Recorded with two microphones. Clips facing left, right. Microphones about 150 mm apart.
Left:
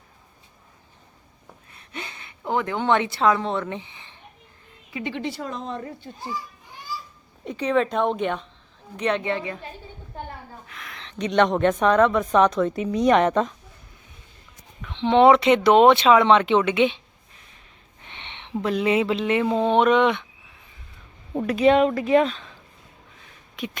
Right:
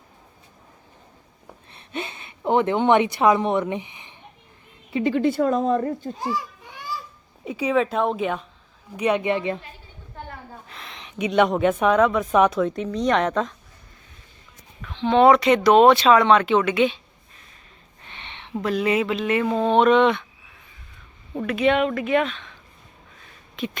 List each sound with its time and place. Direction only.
1.7 s a woman's voice: 20° right (ahead or behind)
4.9 s a woman's voice: 30° right (ahead or behind)
5.1 s a woman's voice: 50° right (ahead or behind)
6.1 s children playing: 90° right
7.4 s speech: 5° right (ahead or behind)
10.7 s a sound: 30° right (ahead or behind)
10.9 s a sound: 15° right (ahead or behind)
11.3 s speech: 5° right (ahead or behind)
14.9 s speech: 25° left (ahead or behind)
18.0 s speech: 20° left (ahead or behind)
21.4 s speech: 35° left (ahead or behind)
23.6 s beatboxing: 15° left (ahead or behind)